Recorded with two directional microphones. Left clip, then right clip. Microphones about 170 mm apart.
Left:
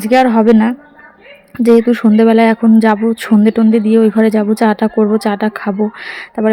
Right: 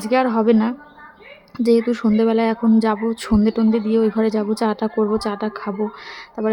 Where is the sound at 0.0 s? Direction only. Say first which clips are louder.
Left 8 dB; 20° left (ahead or behind).